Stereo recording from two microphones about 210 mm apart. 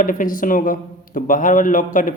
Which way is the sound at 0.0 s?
40° left (ahead or behind).